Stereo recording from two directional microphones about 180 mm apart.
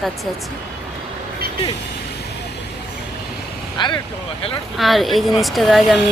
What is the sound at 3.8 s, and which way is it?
Speech, 25° left (ahead or behind).